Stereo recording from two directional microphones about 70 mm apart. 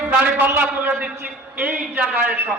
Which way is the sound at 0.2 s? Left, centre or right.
Right.